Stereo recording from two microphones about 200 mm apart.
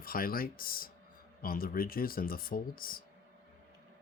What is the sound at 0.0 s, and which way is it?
Speech, 45° left (ahead or behind).